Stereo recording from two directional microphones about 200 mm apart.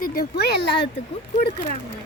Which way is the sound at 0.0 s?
50° left (ahead or behind).